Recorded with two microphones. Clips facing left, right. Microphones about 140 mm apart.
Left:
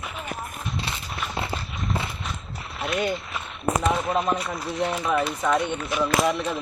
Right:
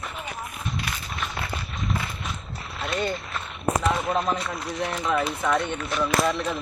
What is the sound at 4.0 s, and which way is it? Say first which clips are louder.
Speech: left 1 dB; 5° left (ahead or behind).